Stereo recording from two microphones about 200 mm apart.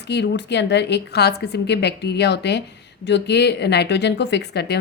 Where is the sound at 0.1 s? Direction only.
60° left (ahead or behind).